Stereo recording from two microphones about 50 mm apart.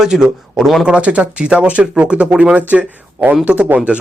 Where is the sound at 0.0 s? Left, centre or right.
Centre.